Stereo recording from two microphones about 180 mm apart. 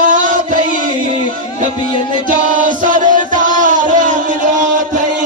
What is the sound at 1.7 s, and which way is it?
Music, 25° left (ahead or behind).